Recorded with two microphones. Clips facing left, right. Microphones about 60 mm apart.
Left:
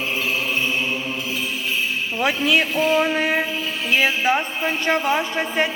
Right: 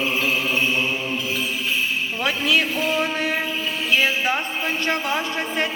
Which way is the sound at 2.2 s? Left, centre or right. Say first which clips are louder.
Left 2 dB; centre.